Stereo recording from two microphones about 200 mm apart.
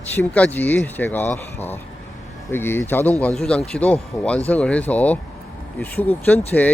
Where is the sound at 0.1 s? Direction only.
10° left (ahead or behind).